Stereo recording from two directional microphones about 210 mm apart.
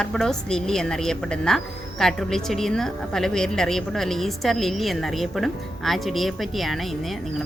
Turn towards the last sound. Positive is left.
turn(degrees=0)  # may be behind; listen again after turning